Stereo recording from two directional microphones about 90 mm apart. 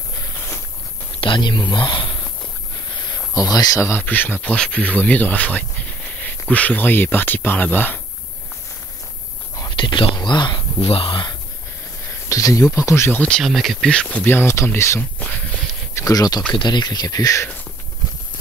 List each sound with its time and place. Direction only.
1.2 s speech: 60° left (ahead or behind)
3.3 s speech: 45° left (ahead or behind)
3.9 s speech: 20° left (ahead or behind)
9.7 s a sound: 60° left (ahead or behind)
10.8 s speech: 90° left; by 11.3 s 65° left (ahead or behind)
12.3 s speech: 40° left (ahead or behind)
13.4 s speech: centre (ahead or behind)
14.2 s speech: 25° left (ahead or behind)
15.0 s speech: 15° left (ahead or behind)
16.0 s speech: 45° left (ahead or behind)